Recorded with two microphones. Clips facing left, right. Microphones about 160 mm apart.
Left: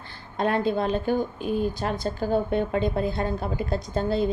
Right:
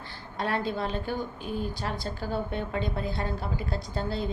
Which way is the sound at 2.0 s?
50° left (ahead or behind).